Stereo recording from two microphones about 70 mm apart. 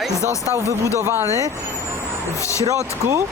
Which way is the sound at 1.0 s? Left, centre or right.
Right.